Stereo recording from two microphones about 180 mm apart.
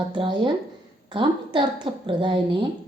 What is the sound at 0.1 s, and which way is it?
A woman's voice, 25° right (ahead or behind).